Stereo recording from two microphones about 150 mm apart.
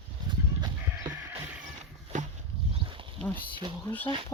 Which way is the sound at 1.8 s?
50° right (ahead or behind).